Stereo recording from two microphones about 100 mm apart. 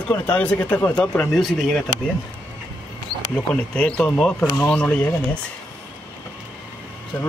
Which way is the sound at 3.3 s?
10° left (ahead or behind).